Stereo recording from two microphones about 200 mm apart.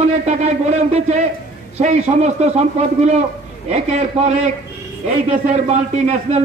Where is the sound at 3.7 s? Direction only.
35° right (ahead or behind).